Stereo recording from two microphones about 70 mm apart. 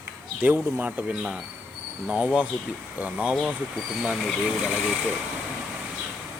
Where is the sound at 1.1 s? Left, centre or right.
Centre.